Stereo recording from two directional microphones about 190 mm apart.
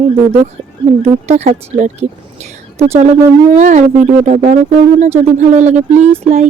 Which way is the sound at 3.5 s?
40° right (ahead or behind).